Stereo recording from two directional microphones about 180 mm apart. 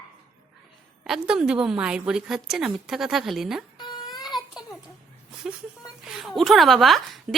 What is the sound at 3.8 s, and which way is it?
Crying, 25° left (ahead or behind).